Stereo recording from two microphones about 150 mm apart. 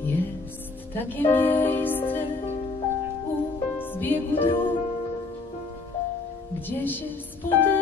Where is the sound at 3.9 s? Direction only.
10° left (ahead or behind).